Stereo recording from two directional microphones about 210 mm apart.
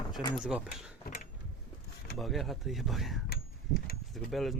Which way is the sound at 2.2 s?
Centre (ahead or behind).